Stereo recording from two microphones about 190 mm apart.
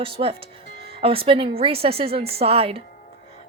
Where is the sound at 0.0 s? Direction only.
30° right (ahead or behind).